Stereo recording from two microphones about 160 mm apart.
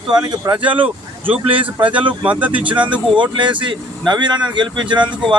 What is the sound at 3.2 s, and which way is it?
Speech, 30° right (ahead or behind).